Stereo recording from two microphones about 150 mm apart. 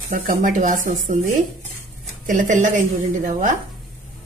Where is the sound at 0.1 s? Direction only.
65° right (ahead or behind).